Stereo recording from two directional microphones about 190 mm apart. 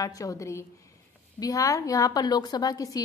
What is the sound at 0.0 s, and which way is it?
A woman's voice, 20° left (ahead or behind).